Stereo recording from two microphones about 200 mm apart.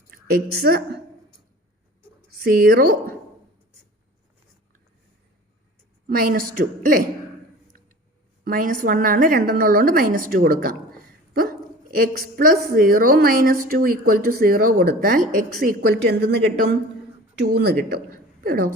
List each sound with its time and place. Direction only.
0.3 s a woman's voice: 50° right (ahead or behind)
2.3 s speech: 50° right (ahead or behind)
6.1 s a woman's voice: 45° right (ahead or behind)
8.4 s a woman's voice: 45° right (ahead or behind)
11.9 s a woman's voice: 50° right (ahead or behind)